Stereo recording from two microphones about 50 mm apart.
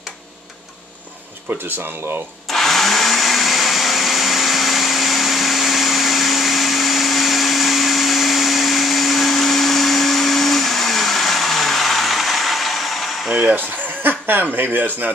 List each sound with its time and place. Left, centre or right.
1.7 s speech: right
2.4 s blender: centre
13.3 s a sound: centre
13.6 s speech: right